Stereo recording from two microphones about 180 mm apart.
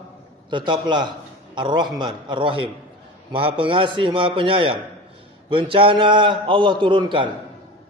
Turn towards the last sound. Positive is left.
turn(degrees=-25)  # may be behind; listen again after turning